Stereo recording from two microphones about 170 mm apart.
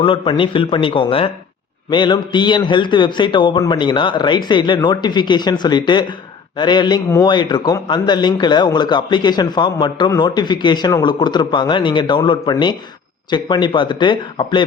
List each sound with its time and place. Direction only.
0.0 s a man's voice: 30° left (ahead or behind)